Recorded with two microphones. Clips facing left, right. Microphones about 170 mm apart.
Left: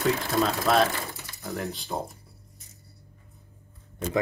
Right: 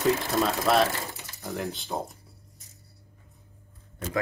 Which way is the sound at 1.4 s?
Centre (ahead or behind).